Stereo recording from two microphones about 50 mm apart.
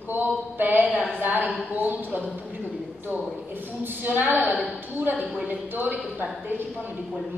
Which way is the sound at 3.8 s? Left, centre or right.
Right.